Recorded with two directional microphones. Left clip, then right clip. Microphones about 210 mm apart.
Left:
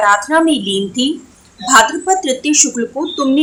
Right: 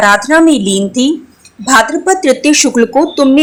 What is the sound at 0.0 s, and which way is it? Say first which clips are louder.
A woman's voice: right 4 dB; 20° right (ahead or behind).